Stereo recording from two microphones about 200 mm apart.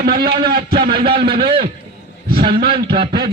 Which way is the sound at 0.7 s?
25° right (ahead or behind).